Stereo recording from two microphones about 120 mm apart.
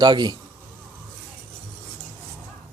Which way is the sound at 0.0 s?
35° right (ahead or behind).